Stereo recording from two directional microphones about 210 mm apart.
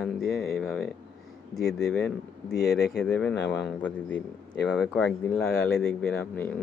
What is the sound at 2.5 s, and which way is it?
Speech, 50° left (ahead or behind).